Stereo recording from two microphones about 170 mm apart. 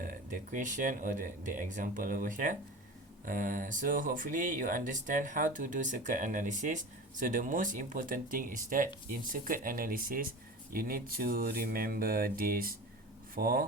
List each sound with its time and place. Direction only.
0.0 s speech: 55° right (ahead or behind)